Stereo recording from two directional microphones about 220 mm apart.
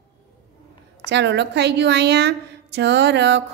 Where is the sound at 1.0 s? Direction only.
50° right (ahead or behind).